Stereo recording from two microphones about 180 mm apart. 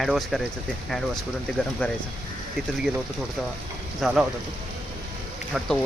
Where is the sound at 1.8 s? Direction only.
10° left (ahead or behind).